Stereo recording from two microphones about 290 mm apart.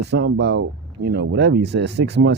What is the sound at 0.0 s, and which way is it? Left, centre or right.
Speech, right.